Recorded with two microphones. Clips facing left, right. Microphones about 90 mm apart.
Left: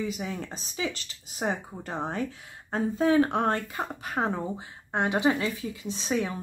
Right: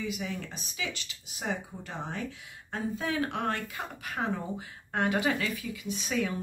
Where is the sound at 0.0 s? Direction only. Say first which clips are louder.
Left 3 dB; 35° left (ahead or behind).